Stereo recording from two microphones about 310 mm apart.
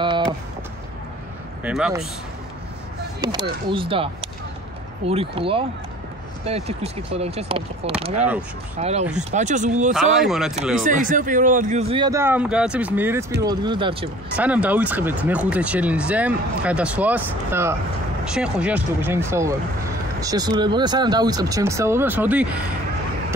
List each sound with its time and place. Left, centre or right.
1.6 s speech: centre
3.2 s a man's voice: centre
9.9 s speech: centre
10.8 s a man's voice: right
14.3 s a man's voice: centre